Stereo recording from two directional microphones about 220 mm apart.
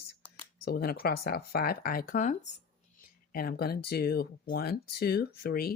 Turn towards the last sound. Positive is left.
turn(degrees=45)  # may be behind; listen again after turning